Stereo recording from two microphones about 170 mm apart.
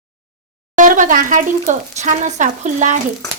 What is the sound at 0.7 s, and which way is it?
Speech, 50° right (ahead or behind).